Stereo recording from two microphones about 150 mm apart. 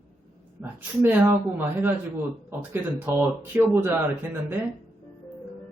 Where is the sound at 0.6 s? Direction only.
10° right (ahead or behind).